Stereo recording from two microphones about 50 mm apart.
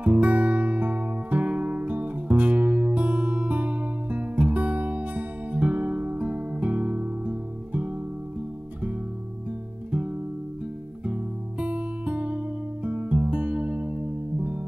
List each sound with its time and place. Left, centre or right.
0.0 s music: right
9.8 s guitar: right
11.1 s music: right